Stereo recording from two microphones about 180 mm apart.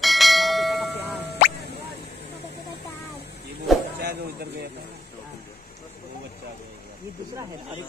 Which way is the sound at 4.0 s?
65° right (ahead or behind).